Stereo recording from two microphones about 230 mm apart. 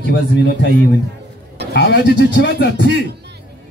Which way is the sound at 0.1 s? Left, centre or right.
Left.